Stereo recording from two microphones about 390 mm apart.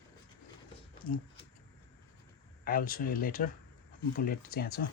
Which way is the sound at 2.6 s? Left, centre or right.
Left.